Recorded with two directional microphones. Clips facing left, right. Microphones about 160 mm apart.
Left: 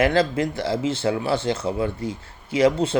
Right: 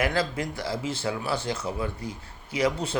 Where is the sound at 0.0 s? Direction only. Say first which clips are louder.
Left 7 dB; 25° left (ahead or behind).